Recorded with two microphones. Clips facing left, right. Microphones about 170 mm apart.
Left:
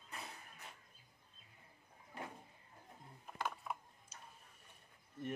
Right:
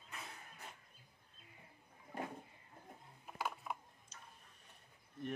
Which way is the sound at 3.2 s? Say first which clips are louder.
Even; 5° right (ahead or behind).